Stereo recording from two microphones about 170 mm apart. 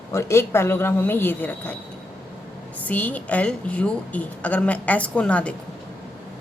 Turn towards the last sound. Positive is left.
turn(degrees=5)  # may be behind; listen again after turning